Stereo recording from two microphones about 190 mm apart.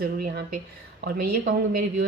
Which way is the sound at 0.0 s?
50° right (ahead or behind).